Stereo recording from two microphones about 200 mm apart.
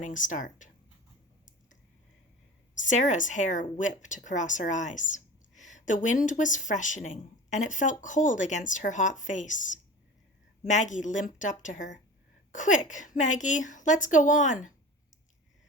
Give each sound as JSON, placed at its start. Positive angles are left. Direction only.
{"t": 0.0, "sound": "speech", "side_deg": 40}
{"t": 2.7, "sound": "speech", "side_deg": 40}